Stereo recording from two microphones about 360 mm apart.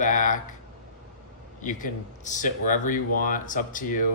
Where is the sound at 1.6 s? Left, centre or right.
Left.